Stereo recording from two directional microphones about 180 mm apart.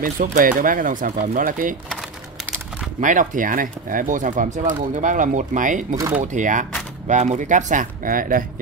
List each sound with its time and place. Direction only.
0.0 s speech: 50° right (ahead or behind)
3.0 s speech: 45° right (ahead or behind)
5.9 s speech: 15° right (ahead or behind)
6.2 s speech: 45° right (ahead or behind)